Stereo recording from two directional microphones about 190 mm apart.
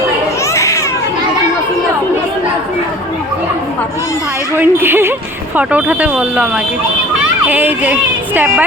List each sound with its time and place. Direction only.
0.5 s babbling: 15° left (ahead or behind)
4.5 s speech: 10° right (ahead or behind)